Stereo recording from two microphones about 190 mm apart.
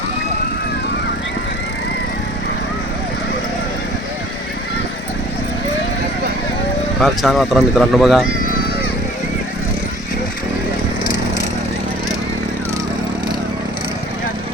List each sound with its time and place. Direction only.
7.0 s speech: centre (ahead or behind)